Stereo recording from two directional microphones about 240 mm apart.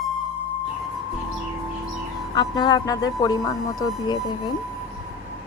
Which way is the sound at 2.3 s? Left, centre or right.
Centre.